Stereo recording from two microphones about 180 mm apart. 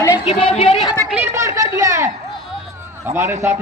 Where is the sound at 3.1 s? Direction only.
15° right (ahead or behind).